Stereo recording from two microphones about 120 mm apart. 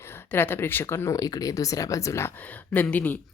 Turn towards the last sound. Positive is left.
turn(degrees=15)  # may be behind; listen again after turning